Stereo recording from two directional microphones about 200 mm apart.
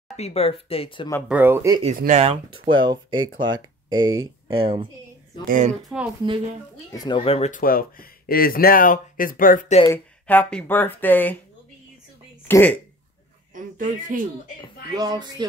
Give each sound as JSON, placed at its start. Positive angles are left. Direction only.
{"t": 0.1, "sound": "speech", "side_deg": 30}
{"t": 1.3, "sound": "speech", "side_deg": -10}
{"t": 2.0, "sound": "speech", "side_deg": -35}
{"t": 2.6, "sound": "speech", "side_deg": -25}
{"t": 5.5, "sound": "speech", "side_deg": -35}
{"t": 6.2, "sound": "speech", "side_deg": -25}
{"t": 6.9, "sound": "speech", "side_deg": 20}
{"t": 7.6, "sound": "speech", "side_deg": 45}
{"t": 9.8, "sound": "speech", "side_deg": 10}
{"t": 12.4, "sound": "speech", "side_deg": 10}
{"t": 13.6, "sound": "speech", "side_deg": -40}
{"t": 15.0, "sound": "speech", "side_deg": -20}